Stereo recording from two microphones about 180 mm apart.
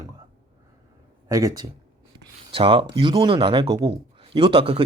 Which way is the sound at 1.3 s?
20° right (ahead or behind).